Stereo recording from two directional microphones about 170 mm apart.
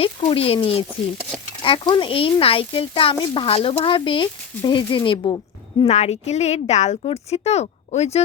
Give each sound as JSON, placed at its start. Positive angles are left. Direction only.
{"t": 0.0, "sound": "speech", "side_deg": 35}
{"t": 5.8, "sound": "speech", "side_deg": 40}